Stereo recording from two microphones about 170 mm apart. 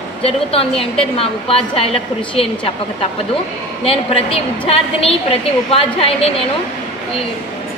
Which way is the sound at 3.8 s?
35° left (ahead or behind).